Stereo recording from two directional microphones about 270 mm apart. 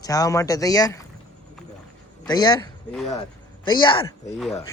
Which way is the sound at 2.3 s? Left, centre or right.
Centre.